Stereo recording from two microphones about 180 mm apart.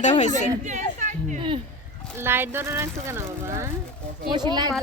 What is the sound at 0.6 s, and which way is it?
Chatter, 45° right (ahead or behind).